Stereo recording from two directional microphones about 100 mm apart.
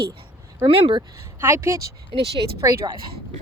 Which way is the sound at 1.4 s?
25° right (ahead or behind).